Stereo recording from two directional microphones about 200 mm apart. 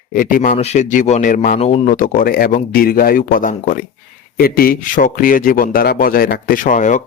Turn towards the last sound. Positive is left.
turn(degrees=40)  # may be behind; listen again after turning